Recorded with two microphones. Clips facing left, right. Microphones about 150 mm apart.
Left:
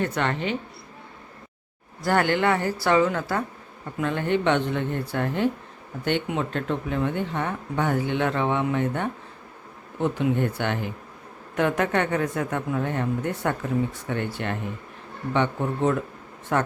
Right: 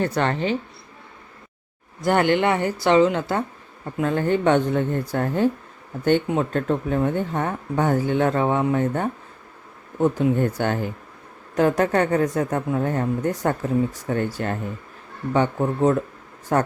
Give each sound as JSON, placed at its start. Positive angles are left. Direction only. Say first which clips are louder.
{"t": 0.0, "sound": "a woman's voice", "louder": "right 3 dB", "side_deg": -35}
{"t": 2.0, "sound": "a woman's voice", "louder": "right 3 dB", "side_deg": -20}
{"t": 4.0, "sound": "a woman's voice", "louder": "right 3 dB", "side_deg": -40}